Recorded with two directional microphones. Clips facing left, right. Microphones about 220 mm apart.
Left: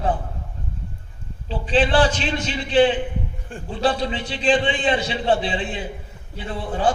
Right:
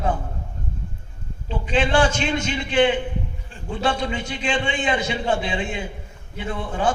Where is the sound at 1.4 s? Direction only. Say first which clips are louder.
Left 2 dB; 35° left (ahead or behind).